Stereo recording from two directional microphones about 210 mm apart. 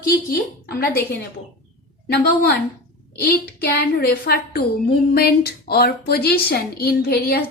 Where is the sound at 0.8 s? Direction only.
45° left (ahead or behind).